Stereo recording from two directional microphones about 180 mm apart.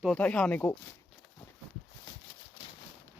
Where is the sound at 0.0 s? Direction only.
5° left (ahead or behind).